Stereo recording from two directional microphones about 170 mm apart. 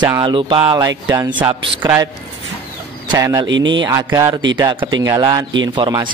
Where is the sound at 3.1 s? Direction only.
20° right (ahead or behind).